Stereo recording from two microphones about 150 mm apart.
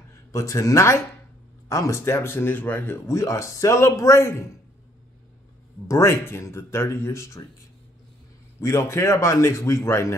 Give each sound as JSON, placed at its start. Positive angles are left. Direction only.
{"t": 0.3, "sound": "speech", "side_deg": 20}
{"t": 5.9, "sound": "speech", "side_deg": 20}
{"t": 8.5, "sound": "speech", "side_deg": 20}